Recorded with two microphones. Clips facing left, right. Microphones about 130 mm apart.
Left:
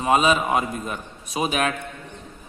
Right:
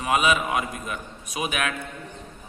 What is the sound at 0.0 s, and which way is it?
A man's voice, 30° left (ahead or behind).